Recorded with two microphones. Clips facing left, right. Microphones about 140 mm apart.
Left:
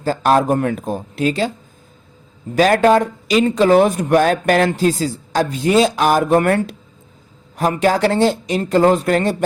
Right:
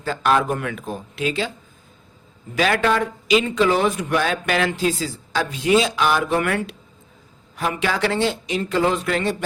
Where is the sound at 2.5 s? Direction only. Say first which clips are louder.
Left 7 dB; 40° left (ahead or behind).